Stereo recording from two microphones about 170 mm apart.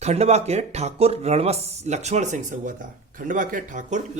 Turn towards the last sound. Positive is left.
turn(degrees=-50)  # may be behind; listen again after turning